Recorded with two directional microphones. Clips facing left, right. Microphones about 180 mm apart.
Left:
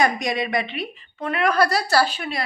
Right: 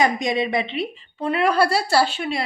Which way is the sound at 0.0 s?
25° right (ahead or behind).